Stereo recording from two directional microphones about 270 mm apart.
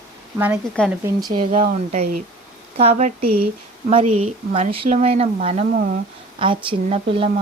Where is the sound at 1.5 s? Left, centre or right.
Right.